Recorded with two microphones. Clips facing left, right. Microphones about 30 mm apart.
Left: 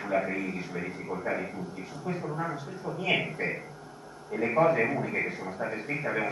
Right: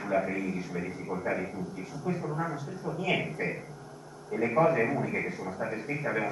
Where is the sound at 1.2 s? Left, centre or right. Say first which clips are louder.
Even; centre.